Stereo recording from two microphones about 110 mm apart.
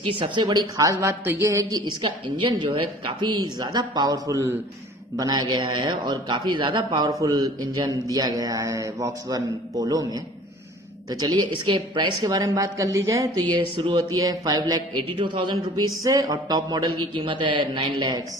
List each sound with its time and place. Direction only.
0.1 s a man's voice: 45° right (ahead or behind); by 13.4 s 30° right (ahead or behind)
13.5 s a man's voice: 45° right (ahead or behind)